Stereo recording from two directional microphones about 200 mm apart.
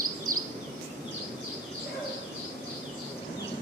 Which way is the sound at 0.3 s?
45° right (ahead or behind).